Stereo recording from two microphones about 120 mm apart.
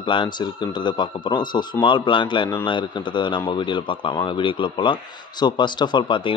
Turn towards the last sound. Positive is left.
turn(degrees=40)  # may be behind; listen again after turning